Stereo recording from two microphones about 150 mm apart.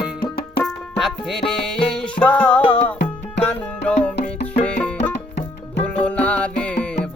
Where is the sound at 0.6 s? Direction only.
Centre (ahead or behind).